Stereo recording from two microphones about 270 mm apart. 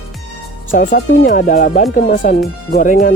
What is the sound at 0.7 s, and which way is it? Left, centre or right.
Speech, left.